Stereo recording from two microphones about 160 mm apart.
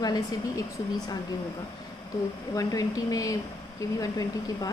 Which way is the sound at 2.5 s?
20° left (ahead or behind).